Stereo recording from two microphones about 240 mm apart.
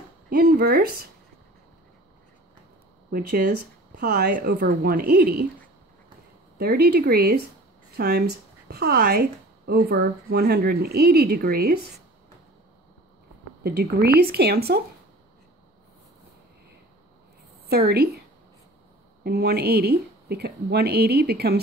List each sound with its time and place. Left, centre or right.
0.3 s speech: right
3.1 s speech: right
6.6 s speech: right
13.7 s speech: right
17.6 s a woman's voice: right
19.2 s speech: right